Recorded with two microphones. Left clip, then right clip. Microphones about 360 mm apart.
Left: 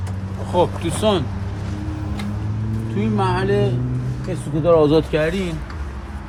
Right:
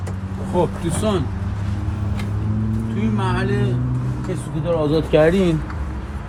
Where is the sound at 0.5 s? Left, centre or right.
Centre.